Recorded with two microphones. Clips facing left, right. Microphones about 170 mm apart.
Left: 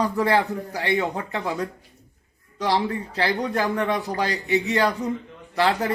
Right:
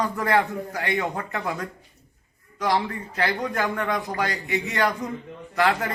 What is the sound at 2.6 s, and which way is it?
A man's voice, 30° left (ahead or behind).